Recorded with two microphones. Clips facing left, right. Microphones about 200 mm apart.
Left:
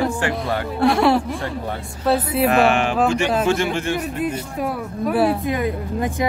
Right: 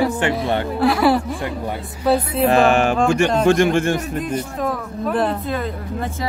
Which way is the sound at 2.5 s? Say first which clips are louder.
Right 3 dB; 40° right (ahead or behind).